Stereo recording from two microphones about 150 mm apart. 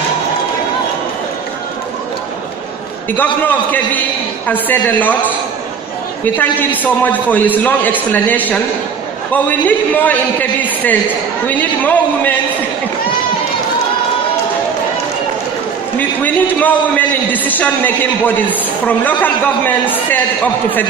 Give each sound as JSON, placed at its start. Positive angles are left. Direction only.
{"t": 3.1, "sound": "a man's voice", "side_deg": 10}
{"t": 6.3, "sound": "a man's voice", "side_deg": 10}
{"t": 11.4, "sound": "a man's voice", "side_deg": 10}
{"t": 16.2, "sound": "a man's voice", "side_deg": 10}